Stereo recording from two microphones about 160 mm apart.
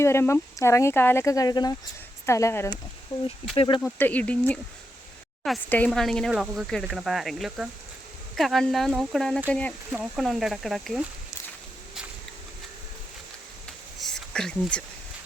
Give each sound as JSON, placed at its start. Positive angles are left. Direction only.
{"t": 0.0, "sound": "speech", "side_deg": 15}
{"t": 3.1, "sound": "speech", "side_deg": 30}
{"t": 3.8, "sound": "speech", "side_deg": 10}
{"t": 14.0, "sound": "a sound", "side_deg": 5}